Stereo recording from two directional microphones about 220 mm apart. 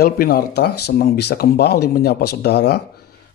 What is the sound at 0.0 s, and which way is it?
Speech, 45° left (ahead or behind).